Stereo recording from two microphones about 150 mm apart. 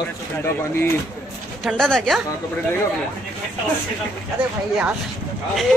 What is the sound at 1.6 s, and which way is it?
Speech, 5° left (ahead or behind).